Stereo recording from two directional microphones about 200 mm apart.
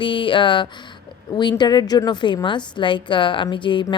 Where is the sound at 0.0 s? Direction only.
25° left (ahead or behind).